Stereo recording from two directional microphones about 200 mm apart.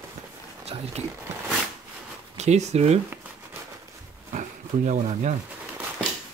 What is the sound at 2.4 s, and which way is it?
Speech, 35° right (ahead or behind).